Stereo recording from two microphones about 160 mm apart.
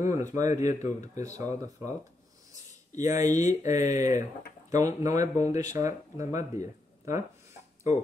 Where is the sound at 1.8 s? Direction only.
15° right (ahead or behind).